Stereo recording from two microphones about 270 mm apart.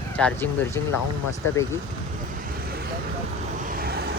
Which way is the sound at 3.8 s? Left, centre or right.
Right.